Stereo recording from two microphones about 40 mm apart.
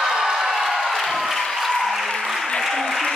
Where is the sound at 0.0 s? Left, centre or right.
Centre.